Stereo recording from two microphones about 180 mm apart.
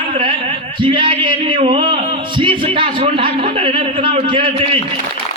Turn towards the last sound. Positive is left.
turn(degrees=-30)  # may be behind; listen again after turning